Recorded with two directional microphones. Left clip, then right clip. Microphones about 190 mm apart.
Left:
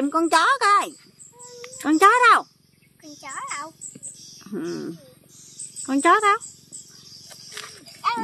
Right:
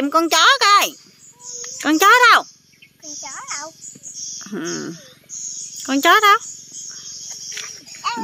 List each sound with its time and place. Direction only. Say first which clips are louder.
0.0 s speech: right 5 dB; 5° right (ahead or behind)
3.0 s a child's voice: right 2 dB; 30° left (ahead or behind)
4.4 s a sound: right 2 dB; 10° right (ahead or behind)
5.8 s speech: right 4 dB; 10° right (ahead or behind)